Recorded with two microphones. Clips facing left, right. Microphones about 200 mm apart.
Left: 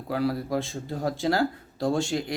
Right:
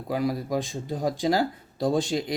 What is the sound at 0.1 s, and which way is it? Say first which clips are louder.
Speech: even; 15° right (ahead or behind).